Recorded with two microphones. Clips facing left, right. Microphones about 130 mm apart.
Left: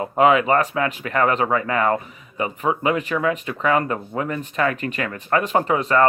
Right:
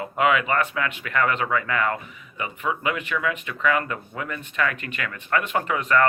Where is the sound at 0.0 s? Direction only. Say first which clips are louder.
Left 5 dB; 35° left (ahead or behind).